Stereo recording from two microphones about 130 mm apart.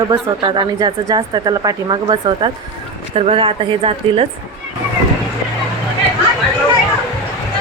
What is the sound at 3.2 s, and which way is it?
A woman's voice, 45° right (ahead or behind).